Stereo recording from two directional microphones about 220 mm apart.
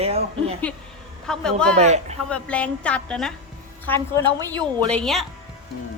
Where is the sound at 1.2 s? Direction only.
Centre (ahead or behind).